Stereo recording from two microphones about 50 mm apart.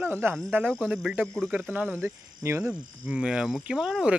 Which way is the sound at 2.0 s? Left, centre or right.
Right.